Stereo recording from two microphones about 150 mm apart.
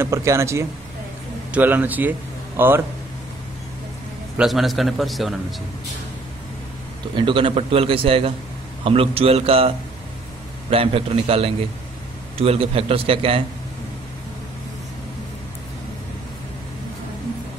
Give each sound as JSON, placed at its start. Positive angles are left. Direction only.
{"t": 0.0, "sound": "speech", "side_deg": -20}
{"t": 4.4, "sound": "a man's voice", "side_deg": 0}
{"t": 7.2, "sound": "a man's voice", "side_deg": -35}
{"t": 10.7, "sound": "a man's voice", "side_deg": -40}